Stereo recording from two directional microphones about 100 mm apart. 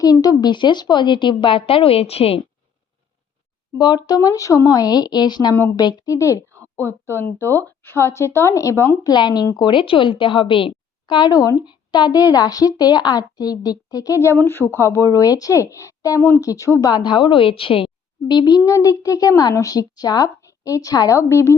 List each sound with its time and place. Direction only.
0.0 s speech: 40° left (ahead or behind); by 2.4 s 80° left
3.8 s a woman's voice: 45° left (ahead or behind)
6.1 s a woman's voice: 30° left (ahead or behind)
9.0 s a woman's voice: 45° left (ahead or behind)
14.3 s a woman's voice: 20° left (ahead or behind)
16.9 s a woman's voice: 50° left (ahead or behind)
18.3 s a woman's voice: 45° left (ahead or behind); by 21.5 s 25° left (ahead or behind)